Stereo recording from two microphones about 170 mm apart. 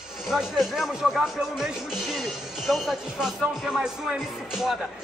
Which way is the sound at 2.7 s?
Centre (ahead or behind).